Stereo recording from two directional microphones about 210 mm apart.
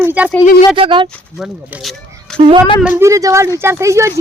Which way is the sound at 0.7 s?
25° right (ahead or behind).